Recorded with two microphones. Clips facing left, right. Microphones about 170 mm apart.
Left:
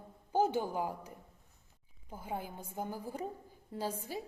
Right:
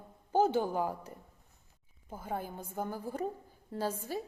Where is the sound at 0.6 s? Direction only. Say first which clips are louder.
Right 3 dB; 50° right (ahead or behind).